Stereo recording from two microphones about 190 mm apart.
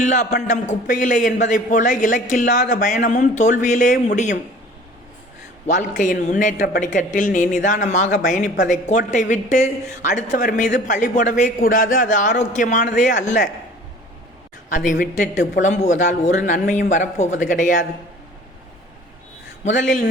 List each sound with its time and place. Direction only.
0.0 s speech: 40° left (ahead or behind)
6.0 s a man's voice: 45° left (ahead or behind)
14.8 s a man's voice: 40° left (ahead or behind)
19.6 s a man's voice: 40° left (ahead or behind)